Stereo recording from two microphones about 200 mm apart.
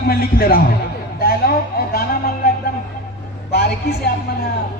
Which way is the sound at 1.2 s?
50° left (ahead or behind).